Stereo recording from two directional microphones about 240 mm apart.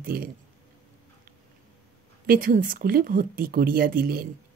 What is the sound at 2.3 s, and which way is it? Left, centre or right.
Speech, right.